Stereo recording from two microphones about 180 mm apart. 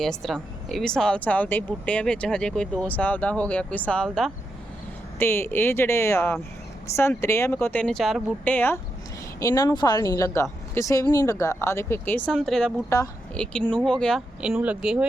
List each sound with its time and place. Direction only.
0.0 s speech: centre (ahead or behind)
5.2 s speech: 15° left (ahead or behind)
8.5 s speech: 10° left (ahead or behind); by 15.0 s 5° right (ahead or behind)